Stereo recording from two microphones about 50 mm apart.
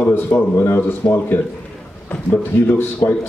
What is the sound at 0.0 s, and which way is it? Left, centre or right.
Speech, left.